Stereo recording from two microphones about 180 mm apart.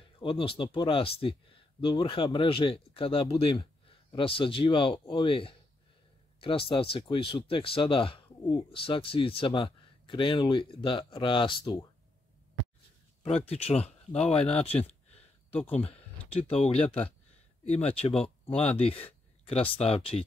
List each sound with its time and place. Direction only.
0.2 s speech: 30° left (ahead or behind)
13.5 s speech: 35° left (ahead or behind)